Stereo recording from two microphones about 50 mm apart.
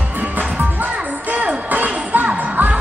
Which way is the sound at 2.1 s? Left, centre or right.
Right.